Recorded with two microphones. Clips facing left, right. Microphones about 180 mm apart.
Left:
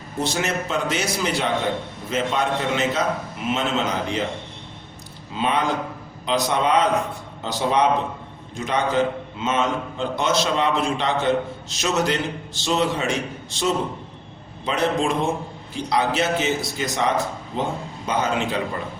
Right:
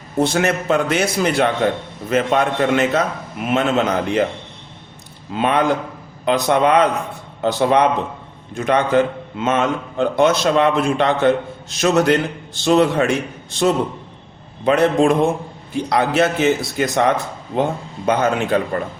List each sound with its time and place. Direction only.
0.2 s a man's voice: 60° right (ahead or behind)
5.3 s a man's voice: 60° right (ahead or behind)